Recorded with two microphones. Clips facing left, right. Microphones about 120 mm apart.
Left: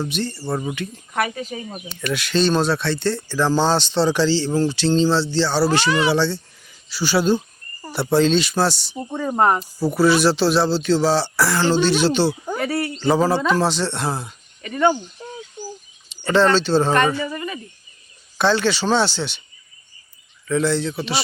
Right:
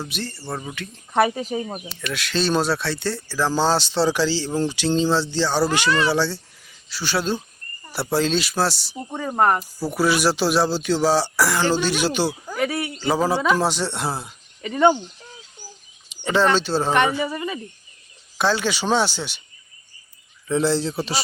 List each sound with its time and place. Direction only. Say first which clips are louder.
0.0 s speech: left 6 dB; 5° right (ahead or behind)
1.3 s speech: right 4 dB; 15° right (ahead or behind)
2.0 s speech: left 5 dB; centre (ahead or behind)
5.9 s speech: left 2 dB; 15° left (ahead or behind)
6.1 s speech: left 2 dB; 10° right (ahead or behind)
9.9 s speech: left 4 dB; 10° right (ahead or behind)
12.5 s speech: left 1 dB; centre (ahead or behind)
14.6 s speech: right 1 dB; 20° right (ahead or behind)
16.2 s speech: left 3 dB; 10° right (ahead or behind)
20.5 s speech: left 1 dB; 30° right (ahead or behind)